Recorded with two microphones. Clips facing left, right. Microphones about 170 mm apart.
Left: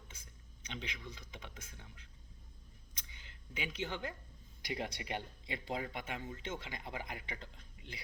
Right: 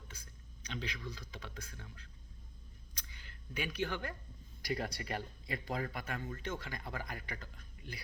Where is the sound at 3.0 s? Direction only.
20° left (ahead or behind).